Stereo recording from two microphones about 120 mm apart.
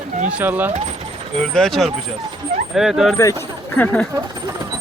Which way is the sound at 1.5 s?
5° left (ahead or behind).